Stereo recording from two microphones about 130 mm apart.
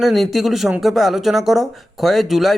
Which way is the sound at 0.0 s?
Centre (ahead or behind).